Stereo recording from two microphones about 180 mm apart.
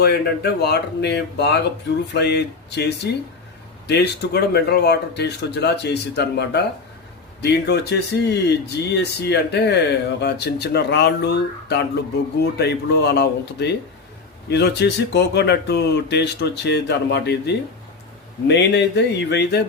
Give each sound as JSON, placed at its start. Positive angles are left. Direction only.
{"t": 0.0, "sound": "speech", "side_deg": 65}